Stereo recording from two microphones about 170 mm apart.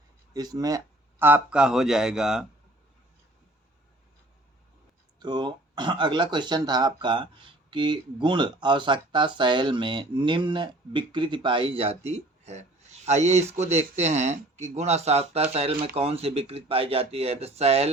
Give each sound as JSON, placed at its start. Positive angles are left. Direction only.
{"t": 0.3, "sound": "speech", "side_deg": -20}
{"t": 1.2, "sound": "a man's voice", "side_deg": -10}
{"t": 5.2, "sound": "speech", "side_deg": -25}